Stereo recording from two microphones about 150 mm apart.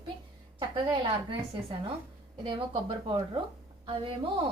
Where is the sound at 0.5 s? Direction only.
30° right (ahead or behind).